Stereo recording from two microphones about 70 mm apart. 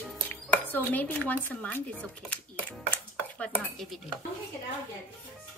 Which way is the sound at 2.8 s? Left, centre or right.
Left.